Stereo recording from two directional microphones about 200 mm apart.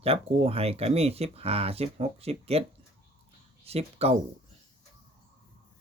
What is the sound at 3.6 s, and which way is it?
Speech, 30° right (ahead or behind).